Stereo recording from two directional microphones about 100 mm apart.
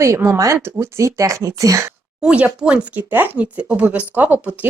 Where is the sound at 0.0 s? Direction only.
25° right (ahead or behind).